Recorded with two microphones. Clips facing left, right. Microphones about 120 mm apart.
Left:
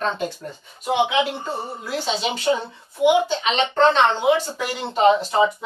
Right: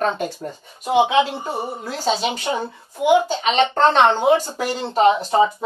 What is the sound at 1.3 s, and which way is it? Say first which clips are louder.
Speech: right 2 dB; 15° right (ahead or behind).